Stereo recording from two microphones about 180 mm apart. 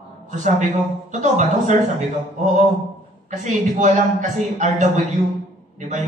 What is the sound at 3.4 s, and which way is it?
A man's voice, 45° right (ahead or behind).